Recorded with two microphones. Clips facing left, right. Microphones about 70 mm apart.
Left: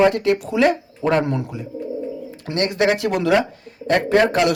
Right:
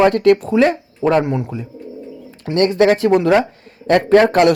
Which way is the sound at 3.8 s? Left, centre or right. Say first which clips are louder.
Right 5 dB; right.